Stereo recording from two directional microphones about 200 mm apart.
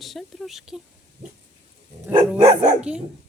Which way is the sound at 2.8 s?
5° right (ahead or behind).